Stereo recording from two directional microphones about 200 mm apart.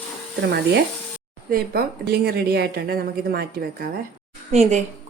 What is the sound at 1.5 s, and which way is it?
A woman's voice, 50° right (ahead or behind).